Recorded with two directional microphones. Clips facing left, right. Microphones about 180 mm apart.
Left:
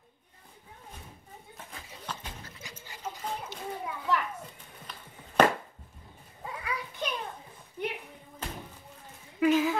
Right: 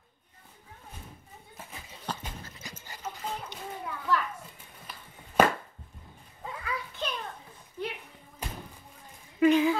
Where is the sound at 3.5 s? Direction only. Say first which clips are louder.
Left 1 dB; centre (ahead or behind).